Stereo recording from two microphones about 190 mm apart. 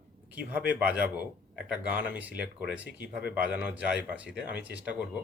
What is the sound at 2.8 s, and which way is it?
Speech, 65° left (ahead or behind).